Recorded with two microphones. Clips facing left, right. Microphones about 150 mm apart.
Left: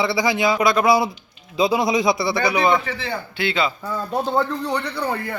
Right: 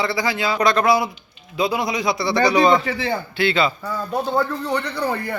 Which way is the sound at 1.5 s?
20° left (ahead or behind).